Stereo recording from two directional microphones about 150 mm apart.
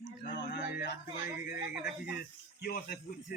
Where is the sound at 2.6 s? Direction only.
90° left.